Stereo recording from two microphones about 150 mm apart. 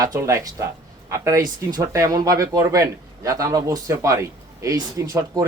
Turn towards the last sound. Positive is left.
turn(degrees=-25)  # may be behind; listen again after turning